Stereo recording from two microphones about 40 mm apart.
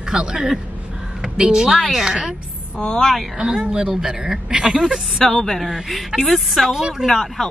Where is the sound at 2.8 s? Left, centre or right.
Centre.